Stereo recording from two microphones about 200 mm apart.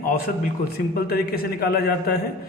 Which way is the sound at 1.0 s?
50° left (ahead or behind).